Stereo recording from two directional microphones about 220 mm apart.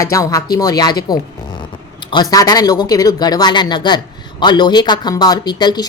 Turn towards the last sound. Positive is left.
turn(degrees=20)  # may be behind; listen again after turning